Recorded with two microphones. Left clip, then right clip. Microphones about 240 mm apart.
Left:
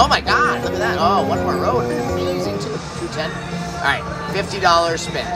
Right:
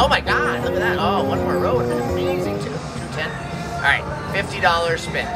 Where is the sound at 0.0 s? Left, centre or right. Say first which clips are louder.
Left 2 dB; left.